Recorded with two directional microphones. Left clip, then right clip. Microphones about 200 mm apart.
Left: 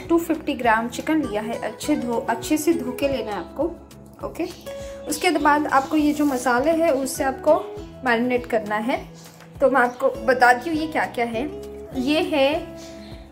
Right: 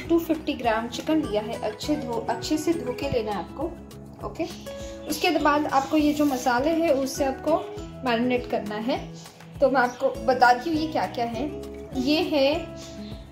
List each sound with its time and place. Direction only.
0.3 s a woman's voice: centre (ahead or behind)
5.2 s a woman's voice: centre (ahead or behind)